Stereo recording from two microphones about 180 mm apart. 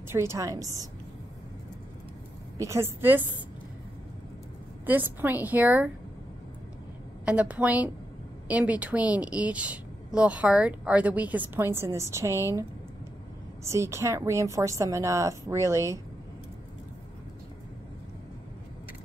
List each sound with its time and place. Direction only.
0.1 s a woman's voice: 15° right (ahead or behind)
2.5 s a woman's voice: 15° right (ahead or behind)
4.8 s a woman's voice: 10° right (ahead or behind)
7.2 s a woman's voice: 5° right (ahead or behind)
13.7 s a woman's voice: 15° right (ahead or behind)